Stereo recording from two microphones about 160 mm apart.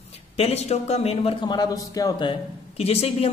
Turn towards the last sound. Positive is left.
turn(degrees=40)  # may be behind; listen again after turning